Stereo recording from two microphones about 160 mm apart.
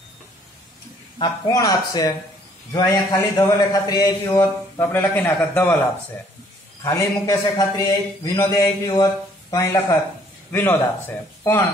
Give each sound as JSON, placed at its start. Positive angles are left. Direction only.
{"t": 1.1, "sound": "a man's voice", "side_deg": 25}
{"t": 6.8, "sound": "a man's voice", "side_deg": 20}